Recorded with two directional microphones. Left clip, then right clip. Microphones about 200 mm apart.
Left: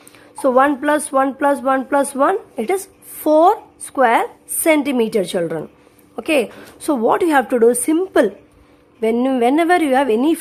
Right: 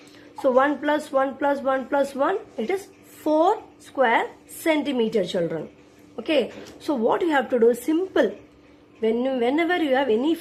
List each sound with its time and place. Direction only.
0.3 s speech: 30° left (ahead or behind)